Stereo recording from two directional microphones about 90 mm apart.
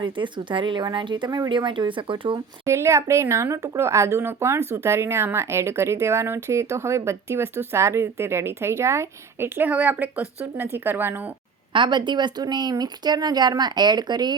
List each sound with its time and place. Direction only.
0.0 s speech: 60° right (ahead or behind)
2.6 s speech: 30° right (ahead or behind)
11.7 s speech: 60° right (ahead or behind)